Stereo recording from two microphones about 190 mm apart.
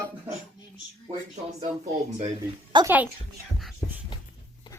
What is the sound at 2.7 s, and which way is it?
Speech, 25° right (ahead or behind).